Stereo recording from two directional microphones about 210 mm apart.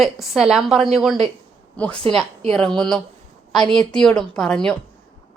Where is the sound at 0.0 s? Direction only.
Centre (ahead or behind).